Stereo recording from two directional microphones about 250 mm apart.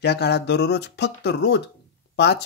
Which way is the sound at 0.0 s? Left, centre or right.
Left.